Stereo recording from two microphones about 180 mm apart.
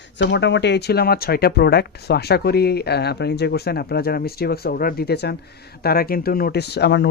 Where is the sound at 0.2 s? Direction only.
80° left.